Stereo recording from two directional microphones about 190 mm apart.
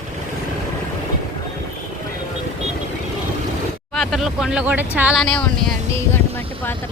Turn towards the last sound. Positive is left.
turn(degrees=10)  # may be behind; listen again after turning